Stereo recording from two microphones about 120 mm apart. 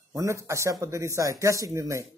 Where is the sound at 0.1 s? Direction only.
25° right (ahead or behind).